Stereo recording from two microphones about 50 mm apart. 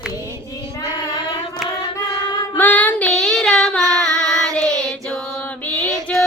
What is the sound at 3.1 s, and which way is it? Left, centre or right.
Child singing, centre.